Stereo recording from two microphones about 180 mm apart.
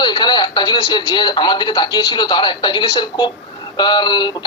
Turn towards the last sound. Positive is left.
turn(degrees=25)  # may be behind; listen again after turning